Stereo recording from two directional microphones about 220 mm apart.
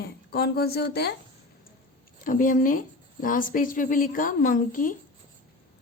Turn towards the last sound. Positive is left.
turn(degrees=40)  # may be behind; listen again after turning